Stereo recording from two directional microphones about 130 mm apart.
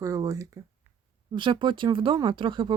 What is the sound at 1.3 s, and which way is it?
Speech, 40° right (ahead or behind).